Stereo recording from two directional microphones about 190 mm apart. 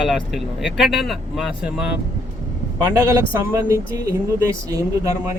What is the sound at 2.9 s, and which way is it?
Speech, 15° right (ahead or behind).